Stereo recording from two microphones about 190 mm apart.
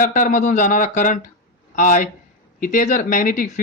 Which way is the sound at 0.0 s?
45° left (ahead or behind).